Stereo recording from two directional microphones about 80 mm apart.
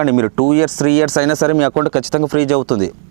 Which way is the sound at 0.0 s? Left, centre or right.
Centre.